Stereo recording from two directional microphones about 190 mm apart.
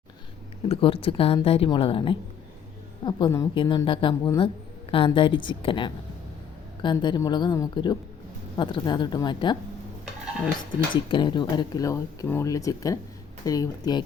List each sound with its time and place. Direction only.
0.7 s a woman's voice: 30° left (ahead or behind)
11.1 s a woman's voice: 25° left (ahead or behind)